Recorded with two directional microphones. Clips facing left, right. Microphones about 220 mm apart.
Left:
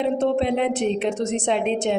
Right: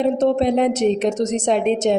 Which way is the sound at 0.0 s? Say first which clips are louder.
Right 4 dB; 40° right (ahead or behind).